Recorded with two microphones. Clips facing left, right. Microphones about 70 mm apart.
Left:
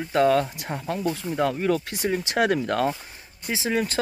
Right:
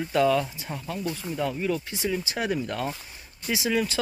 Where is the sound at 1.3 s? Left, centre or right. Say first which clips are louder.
Left 4 dB; left.